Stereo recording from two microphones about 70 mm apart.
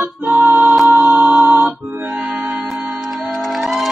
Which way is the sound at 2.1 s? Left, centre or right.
Centre.